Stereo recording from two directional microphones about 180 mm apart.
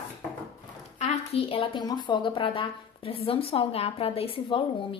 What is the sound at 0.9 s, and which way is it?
A woman's voice, 35° left (ahead or behind).